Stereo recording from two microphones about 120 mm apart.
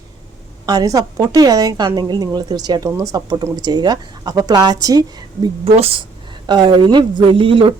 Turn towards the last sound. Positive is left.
turn(degrees=-45)  # may be behind; listen again after turning